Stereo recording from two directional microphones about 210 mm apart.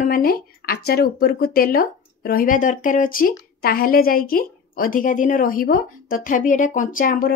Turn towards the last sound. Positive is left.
turn(degrees=40)  # may be behind; listen again after turning